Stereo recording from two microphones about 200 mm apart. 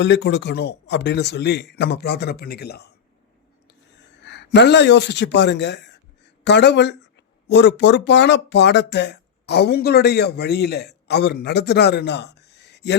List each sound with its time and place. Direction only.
0.0 s speech: 60° left (ahead or behind)
4.2 s speech: 60° left (ahead or behind)